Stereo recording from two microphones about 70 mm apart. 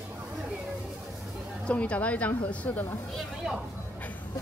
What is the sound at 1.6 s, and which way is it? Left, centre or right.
A woman's voice, centre.